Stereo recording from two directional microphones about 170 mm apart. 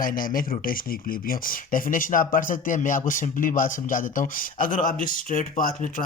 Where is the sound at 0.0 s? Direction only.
55° left (ahead or behind).